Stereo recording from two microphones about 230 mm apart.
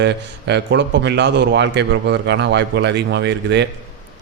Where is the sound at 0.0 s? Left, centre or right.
Right.